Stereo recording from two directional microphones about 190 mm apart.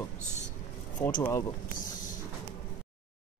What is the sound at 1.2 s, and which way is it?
Speech, 20° left (ahead or behind).